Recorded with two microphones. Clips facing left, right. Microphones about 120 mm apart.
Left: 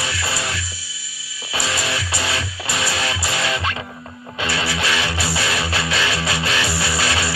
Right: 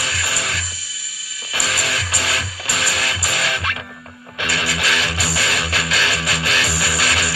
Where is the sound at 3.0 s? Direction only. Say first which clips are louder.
Left 1 dB; 20° left (ahead or behind).